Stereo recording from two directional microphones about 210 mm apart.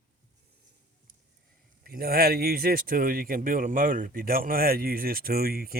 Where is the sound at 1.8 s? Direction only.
45° right (ahead or behind).